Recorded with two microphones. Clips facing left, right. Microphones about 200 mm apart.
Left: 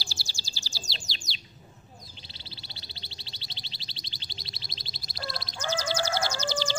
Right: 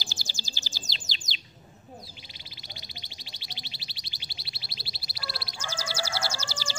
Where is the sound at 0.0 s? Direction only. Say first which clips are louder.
Right 2 dB; 20° right (ahead or behind).